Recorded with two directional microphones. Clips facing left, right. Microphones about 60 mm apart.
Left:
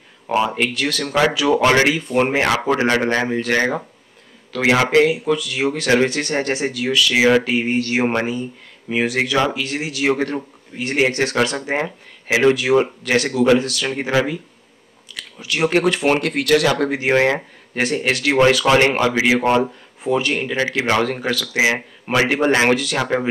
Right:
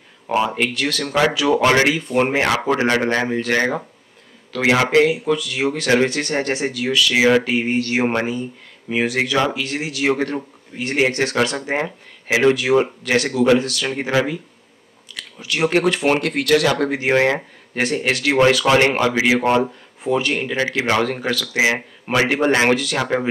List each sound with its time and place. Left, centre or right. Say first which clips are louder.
0.6 s a man's voice: even; centre
11.6 s speech: even; left
15.1 s a sound: even; centre
15.4 s speech: even; centre
17.8 s speech: even; centre